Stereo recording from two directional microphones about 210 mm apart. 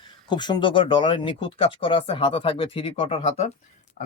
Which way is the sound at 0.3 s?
20° left (ahead or behind).